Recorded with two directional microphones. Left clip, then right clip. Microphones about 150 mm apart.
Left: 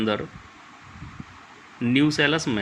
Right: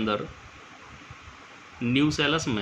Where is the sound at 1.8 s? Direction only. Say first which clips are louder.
Left 3 dB; 30° left (ahead or behind).